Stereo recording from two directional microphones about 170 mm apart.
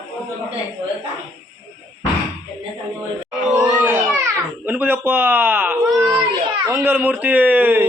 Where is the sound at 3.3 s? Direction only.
5° right (ahead or behind).